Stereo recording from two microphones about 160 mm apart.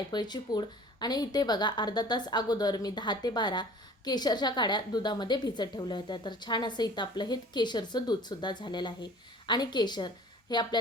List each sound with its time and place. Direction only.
0.1 s a woman's voice: 25° left (ahead or behind)